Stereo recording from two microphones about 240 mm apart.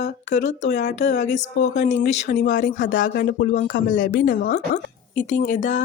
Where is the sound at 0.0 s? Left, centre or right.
Left.